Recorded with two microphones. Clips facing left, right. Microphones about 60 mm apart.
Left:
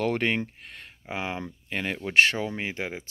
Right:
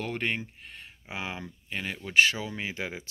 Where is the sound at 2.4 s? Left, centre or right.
Left.